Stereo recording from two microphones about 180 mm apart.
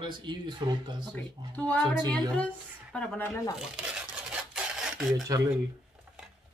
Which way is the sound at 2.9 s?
5° left (ahead or behind).